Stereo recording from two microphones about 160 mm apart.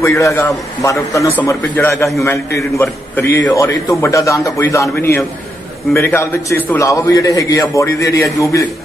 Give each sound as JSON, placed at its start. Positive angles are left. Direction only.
{"t": 0.0, "sound": "a man's voice", "side_deg": 20}